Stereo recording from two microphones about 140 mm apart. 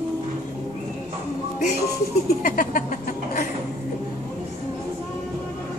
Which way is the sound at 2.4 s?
90° left.